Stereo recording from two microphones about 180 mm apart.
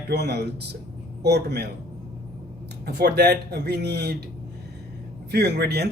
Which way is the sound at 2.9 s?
65° right (ahead or behind).